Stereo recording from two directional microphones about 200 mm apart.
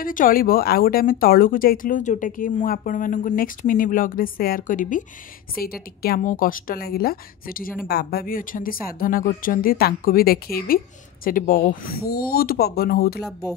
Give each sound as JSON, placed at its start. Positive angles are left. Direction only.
{"t": 0.0, "sound": "a woman's voice", "side_deg": 45}